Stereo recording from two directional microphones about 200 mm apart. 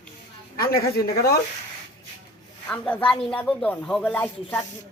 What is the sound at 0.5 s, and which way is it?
Speech, 50° left (ahead or behind).